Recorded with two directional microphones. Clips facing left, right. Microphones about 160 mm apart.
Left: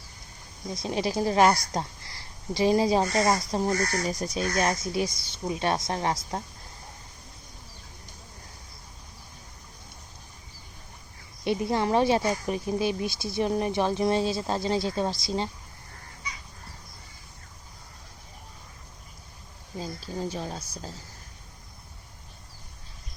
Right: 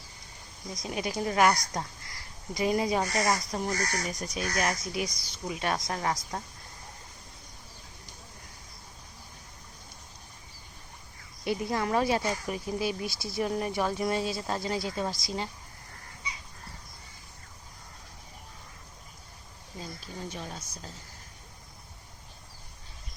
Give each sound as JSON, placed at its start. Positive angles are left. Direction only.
{"t": 0.7, "sound": "speech", "side_deg": 30}
{"t": 11.4, "sound": "speech", "side_deg": 25}
{"t": 19.8, "sound": "speech", "side_deg": 35}